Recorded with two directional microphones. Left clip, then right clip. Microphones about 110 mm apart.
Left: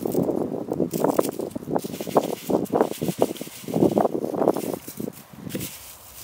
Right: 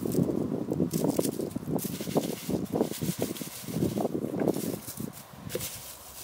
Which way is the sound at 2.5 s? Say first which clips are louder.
Left 10 dB; 65° left (ahead or behind).